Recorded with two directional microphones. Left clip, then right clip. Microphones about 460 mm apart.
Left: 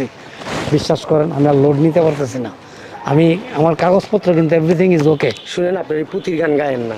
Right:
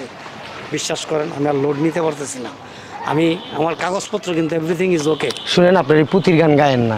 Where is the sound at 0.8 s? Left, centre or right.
Left.